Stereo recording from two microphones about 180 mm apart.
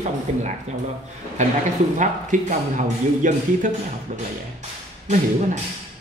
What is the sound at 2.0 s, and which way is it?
Speech, 45° right (ahead or behind).